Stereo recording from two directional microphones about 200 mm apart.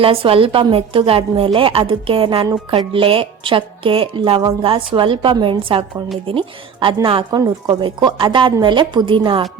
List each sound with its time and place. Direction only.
0.0 s speech: 30° right (ahead or behind)